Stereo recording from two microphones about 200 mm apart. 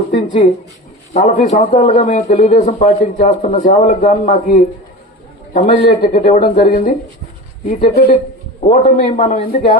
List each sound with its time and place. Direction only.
0.4 s a man's voice: 35° left (ahead or behind)
3.6 s a man's voice: 45° left (ahead or behind)